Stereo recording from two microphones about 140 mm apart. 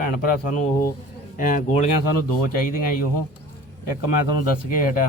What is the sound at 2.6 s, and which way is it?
Speech, 90° left.